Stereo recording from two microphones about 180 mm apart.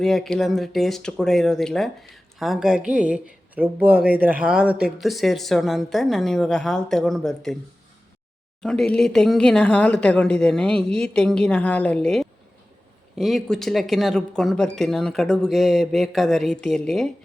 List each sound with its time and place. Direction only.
0.0 s speech: centre (ahead or behind)
8.6 s speech: 5° left (ahead or behind)